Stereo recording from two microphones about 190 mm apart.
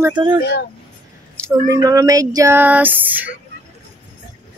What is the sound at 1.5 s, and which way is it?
Speech, 20° right (ahead or behind).